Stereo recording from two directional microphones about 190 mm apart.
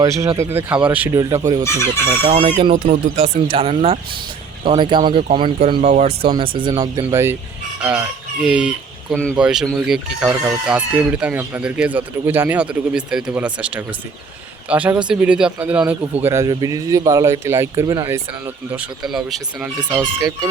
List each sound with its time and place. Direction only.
0.2 s speech: 15° right (ahead or behind)
1.6 s speech: 15° left (ahead or behind)
2.2 s speech: 25° right (ahead or behind)
2.7 s speech: 35° right (ahead or behind); by 20.5 s 15° right (ahead or behind)